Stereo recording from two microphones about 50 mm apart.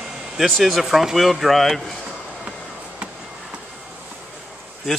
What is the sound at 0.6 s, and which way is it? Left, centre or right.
Speech, centre.